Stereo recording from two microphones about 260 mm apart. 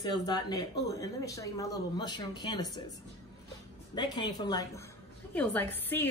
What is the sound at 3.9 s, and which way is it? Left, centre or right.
Speech, centre.